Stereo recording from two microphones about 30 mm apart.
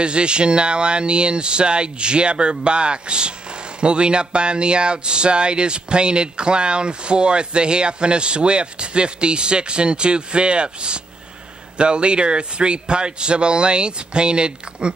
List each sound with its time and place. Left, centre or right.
0.0 s speech: right